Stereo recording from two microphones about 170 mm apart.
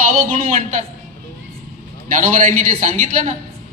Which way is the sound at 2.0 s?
50° right (ahead or behind).